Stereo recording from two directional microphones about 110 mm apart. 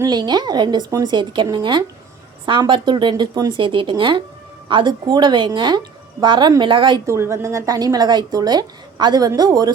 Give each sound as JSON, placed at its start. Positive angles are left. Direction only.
{"t": 0.0, "sound": "a woman's voice", "side_deg": -40}
{"t": 0.9, "sound": "speech", "side_deg": -30}
{"t": 1.1, "sound": "a woman's voice", "side_deg": -45}
{"t": 3.6, "sound": "speech", "side_deg": -50}
{"t": 7.1, "sound": "a woman's voice", "side_deg": -25}